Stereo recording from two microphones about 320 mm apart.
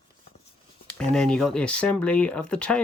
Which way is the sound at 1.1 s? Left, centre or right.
Centre.